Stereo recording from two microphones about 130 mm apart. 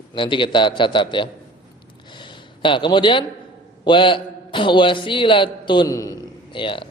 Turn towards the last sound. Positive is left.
turn(degrees=40)  # may be behind; listen again after turning